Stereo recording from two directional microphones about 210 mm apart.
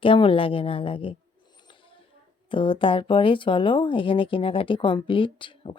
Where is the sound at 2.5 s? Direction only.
25° left (ahead or behind).